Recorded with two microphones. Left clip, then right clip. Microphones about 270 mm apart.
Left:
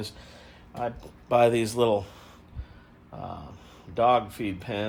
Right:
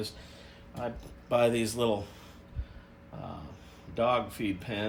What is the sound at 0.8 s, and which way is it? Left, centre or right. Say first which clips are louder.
Speech: left 5 dB; left.